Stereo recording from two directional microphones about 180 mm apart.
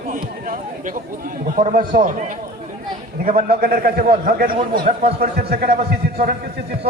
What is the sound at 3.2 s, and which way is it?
A man's voice, 55° right (ahead or behind).